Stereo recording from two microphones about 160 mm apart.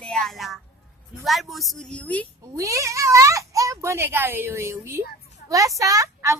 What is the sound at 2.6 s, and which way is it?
A woman's voice, 20° right (ahead or behind).